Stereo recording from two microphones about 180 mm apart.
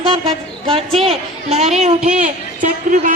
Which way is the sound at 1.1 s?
35° right (ahead or behind).